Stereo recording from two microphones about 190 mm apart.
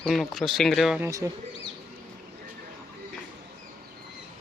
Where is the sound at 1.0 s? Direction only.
15° right (ahead or behind).